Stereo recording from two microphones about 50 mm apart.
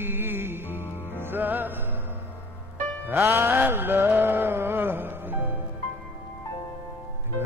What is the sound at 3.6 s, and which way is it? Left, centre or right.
Music, right.